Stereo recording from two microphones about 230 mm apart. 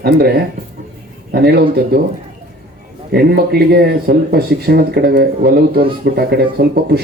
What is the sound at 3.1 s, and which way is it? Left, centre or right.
Speech, right.